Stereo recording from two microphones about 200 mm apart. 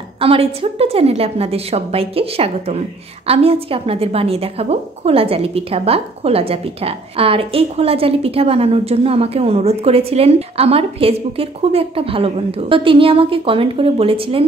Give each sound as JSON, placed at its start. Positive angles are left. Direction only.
{"t": 0.2, "sound": "a woman's voice", "side_deg": -30}